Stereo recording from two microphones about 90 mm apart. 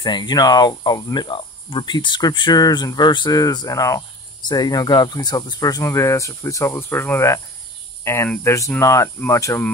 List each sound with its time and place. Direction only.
0.0 s speech: 50° left (ahead or behind); by 9.6 s 30° left (ahead or behind)